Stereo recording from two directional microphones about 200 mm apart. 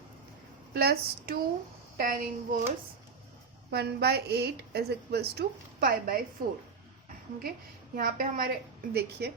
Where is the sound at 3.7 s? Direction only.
55° right (ahead or behind).